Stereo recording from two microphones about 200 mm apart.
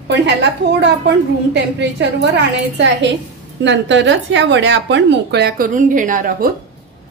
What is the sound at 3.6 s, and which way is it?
A woman's voice, 65° right (ahead or behind).